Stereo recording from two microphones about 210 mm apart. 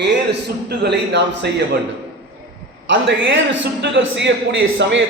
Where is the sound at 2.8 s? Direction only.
60° right (ahead or behind).